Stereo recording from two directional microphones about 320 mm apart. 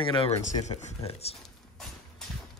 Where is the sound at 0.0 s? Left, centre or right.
Centre.